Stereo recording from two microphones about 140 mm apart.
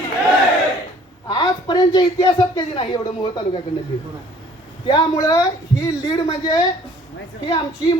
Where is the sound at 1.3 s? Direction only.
30° left (ahead or behind).